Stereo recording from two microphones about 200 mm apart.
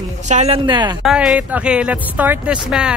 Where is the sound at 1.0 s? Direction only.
Centre (ahead or behind).